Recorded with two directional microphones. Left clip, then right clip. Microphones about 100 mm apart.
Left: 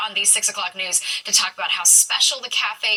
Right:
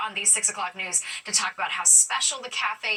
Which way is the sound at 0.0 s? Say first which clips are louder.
Left 5 dB; 30° left (ahead or behind).